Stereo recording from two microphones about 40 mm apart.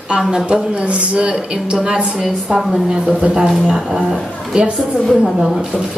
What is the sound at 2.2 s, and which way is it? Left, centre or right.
Speech, centre.